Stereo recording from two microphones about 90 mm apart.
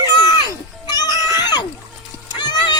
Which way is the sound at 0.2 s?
50° left (ahead or behind).